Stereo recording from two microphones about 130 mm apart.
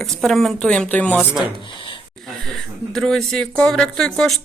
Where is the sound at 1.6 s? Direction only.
40° left (ahead or behind).